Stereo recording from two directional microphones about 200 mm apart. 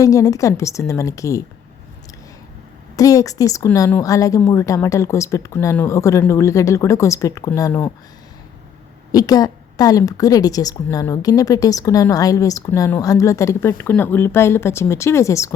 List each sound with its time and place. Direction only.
0.0 s a woman's voice: 15° left (ahead or behind)
2.9 s a woman's voice: 15° left (ahead or behind)
9.1 s a woman's voice: 20° left (ahead or behind)